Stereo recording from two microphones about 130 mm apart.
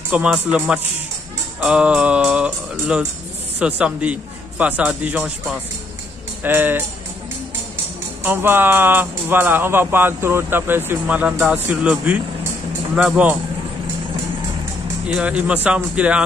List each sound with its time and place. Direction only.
0.1 s speech: 10° right (ahead or behind)
6.4 s speech: 15° right (ahead or behind)
8.2 s speech: 15° right (ahead or behind)
15.0 s speech: 10° right (ahead or behind)